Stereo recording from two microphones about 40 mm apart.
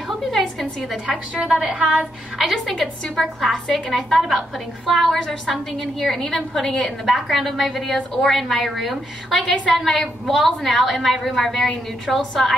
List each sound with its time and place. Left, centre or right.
0.3 s a sound: centre
1.4 s a woman's voice: centre
2.3 s a woman's voice: centre